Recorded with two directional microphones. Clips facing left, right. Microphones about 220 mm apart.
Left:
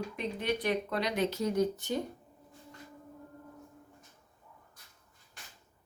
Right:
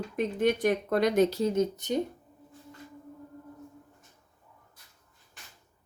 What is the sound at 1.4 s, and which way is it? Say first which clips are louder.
Speech: right 3 dB; 25° right (ahead or behind).